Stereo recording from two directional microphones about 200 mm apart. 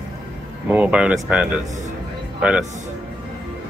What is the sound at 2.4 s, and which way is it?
Speech, 5° right (ahead or behind).